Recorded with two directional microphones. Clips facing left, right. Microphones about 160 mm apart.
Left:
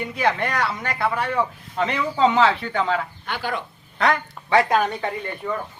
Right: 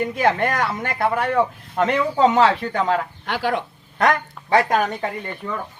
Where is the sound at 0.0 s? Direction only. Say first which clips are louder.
Right 3 dB; 45° right (ahead or behind).